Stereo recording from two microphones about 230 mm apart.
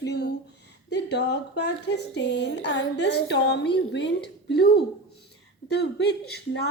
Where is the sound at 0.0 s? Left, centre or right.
Left.